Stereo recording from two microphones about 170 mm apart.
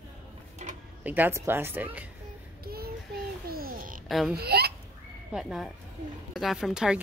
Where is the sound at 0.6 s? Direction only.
45° right (ahead or behind).